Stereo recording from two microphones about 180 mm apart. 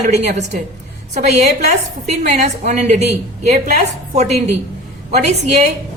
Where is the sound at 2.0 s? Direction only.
40° right (ahead or behind).